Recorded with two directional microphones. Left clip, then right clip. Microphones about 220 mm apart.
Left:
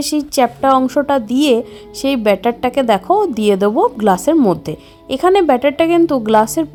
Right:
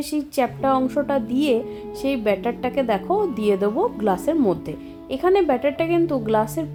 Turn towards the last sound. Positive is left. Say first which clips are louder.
# left 8 dB
turn(degrees=45)  # may be behind; listen again after turning